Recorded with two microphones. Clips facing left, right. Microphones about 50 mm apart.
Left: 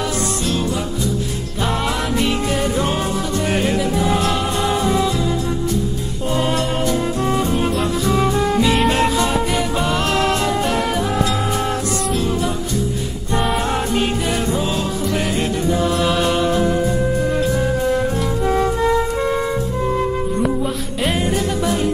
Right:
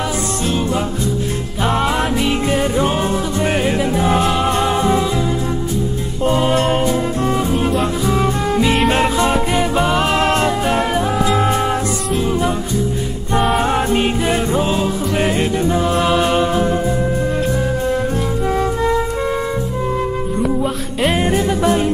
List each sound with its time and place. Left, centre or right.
0.5 s music: right
6.5 s music: right
8.8 s music: right
13.6 s music: right
21.2 s music: right